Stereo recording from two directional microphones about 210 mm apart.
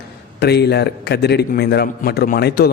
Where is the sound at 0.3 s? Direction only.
50° left (ahead or behind).